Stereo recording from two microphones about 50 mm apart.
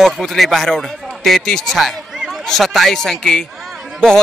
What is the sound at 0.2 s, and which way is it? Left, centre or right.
A man's voice, centre.